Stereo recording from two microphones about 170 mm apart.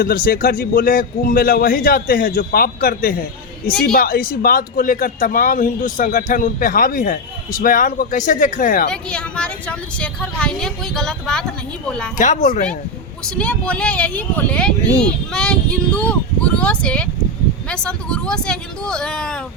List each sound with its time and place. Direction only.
0.0 s a man's voice: 60° left (ahead or behind)
8.9 s speech: 5° left (ahead or behind)
12.1 s speech: 45° left (ahead or behind)
13.3 s speech: 5° left (ahead or behind)